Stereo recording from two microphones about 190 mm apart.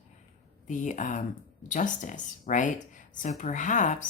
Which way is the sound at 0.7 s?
40° left (ahead or behind).